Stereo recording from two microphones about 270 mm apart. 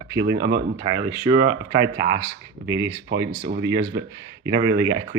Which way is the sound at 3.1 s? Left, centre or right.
Right.